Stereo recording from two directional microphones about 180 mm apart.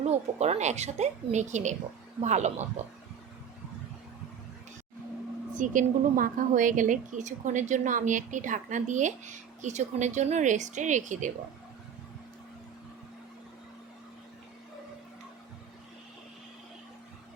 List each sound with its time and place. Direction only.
0.0 s a woman's voice: 35° right (ahead or behind)
5.5 s a woman's voice: 45° right (ahead or behind)